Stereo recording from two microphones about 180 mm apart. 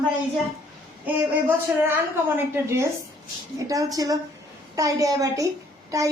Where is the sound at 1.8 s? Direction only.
10° right (ahead or behind).